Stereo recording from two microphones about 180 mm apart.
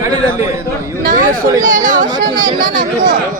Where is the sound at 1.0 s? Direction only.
50° right (ahead or behind).